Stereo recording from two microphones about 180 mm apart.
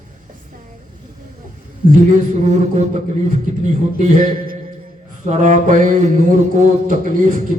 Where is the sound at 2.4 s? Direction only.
40° right (ahead or behind).